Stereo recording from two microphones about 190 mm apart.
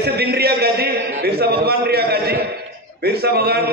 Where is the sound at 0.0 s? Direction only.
55° right (ahead or behind).